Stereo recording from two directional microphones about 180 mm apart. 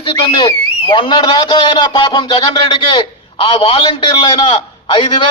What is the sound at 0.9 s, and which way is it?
A man's voice, 25° left (ahead or behind).